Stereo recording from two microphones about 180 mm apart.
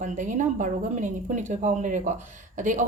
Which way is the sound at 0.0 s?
45° right (ahead or behind).